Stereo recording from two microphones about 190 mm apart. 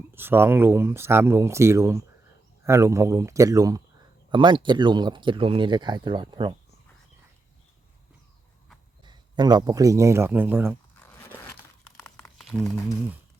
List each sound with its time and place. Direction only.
0.1 s speech: 10° right (ahead or behind)
9.0 s speech: 25° right (ahead or behind)
11.0 s a sound: 10° left (ahead or behind)